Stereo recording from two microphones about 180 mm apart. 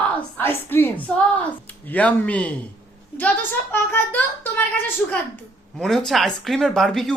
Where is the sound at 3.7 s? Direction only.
10° left (ahead or behind).